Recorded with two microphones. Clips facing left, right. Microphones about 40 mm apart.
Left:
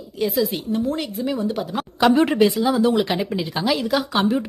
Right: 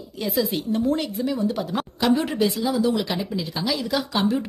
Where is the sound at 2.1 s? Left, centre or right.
Left.